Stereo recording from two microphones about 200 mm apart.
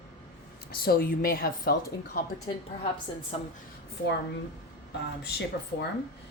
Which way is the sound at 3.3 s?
30° left (ahead or behind).